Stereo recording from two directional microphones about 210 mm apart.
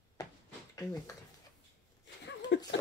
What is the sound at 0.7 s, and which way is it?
Speech, 15° left (ahead or behind).